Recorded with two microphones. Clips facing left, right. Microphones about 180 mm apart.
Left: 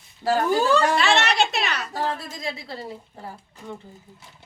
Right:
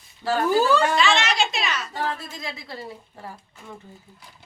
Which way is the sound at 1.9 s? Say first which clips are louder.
Left 1 dB; 35° left (ahead or behind).